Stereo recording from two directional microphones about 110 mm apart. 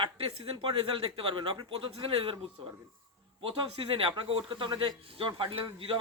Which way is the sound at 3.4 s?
50° right (ahead or behind).